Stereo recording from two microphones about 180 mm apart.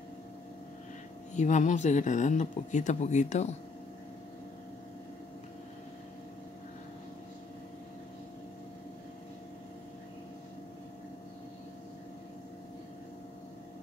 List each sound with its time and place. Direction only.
1.3 s speech: 40° left (ahead or behind)